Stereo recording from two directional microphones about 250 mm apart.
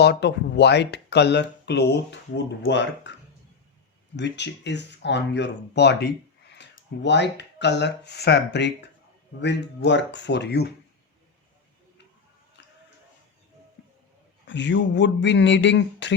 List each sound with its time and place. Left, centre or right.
0.0 s speech: left
4.2 s speech: left
14.4 s speech: left